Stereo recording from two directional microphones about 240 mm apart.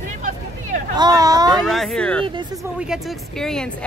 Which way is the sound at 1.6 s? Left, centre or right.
Centre.